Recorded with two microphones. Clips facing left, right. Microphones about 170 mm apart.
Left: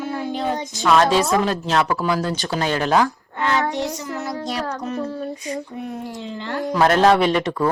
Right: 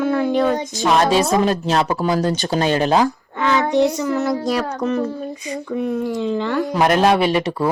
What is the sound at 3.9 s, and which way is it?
Speech, 90° right.